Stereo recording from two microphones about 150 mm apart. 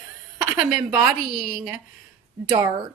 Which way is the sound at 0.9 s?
5° right (ahead or behind).